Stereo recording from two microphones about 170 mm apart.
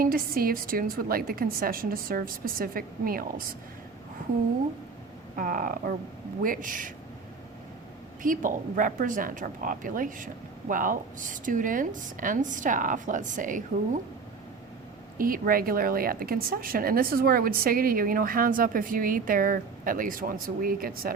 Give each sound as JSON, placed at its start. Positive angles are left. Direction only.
{"t": 0.0, "sound": "a woman's voice", "side_deg": -60}
{"t": 5.4, "sound": "speech", "side_deg": -55}
{"t": 8.2, "sound": "speech", "side_deg": -50}
{"t": 15.2, "sound": "a woman's voice", "side_deg": -55}